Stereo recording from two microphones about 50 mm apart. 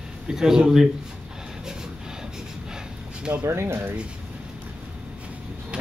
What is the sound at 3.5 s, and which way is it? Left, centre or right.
Speech, right.